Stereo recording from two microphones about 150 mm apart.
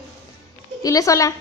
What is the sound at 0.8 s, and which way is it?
Speech, 20° left (ahead or behind).